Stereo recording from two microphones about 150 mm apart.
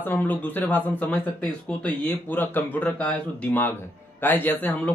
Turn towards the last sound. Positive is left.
turn(degrees=10)  # may be behind; listen again after turning